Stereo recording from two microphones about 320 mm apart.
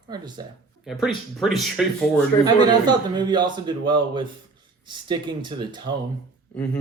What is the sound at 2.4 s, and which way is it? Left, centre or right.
A man's voice, centre.